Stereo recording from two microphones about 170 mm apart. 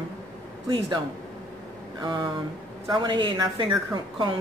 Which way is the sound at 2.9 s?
25° right (ahead or behind).